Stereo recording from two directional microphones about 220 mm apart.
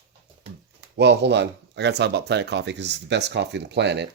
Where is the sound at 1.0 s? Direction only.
50° right (ahead or behind).